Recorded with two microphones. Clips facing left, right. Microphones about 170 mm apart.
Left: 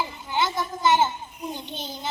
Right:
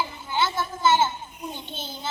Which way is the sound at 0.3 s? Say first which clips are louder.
Even; 15° left (ahead or behind).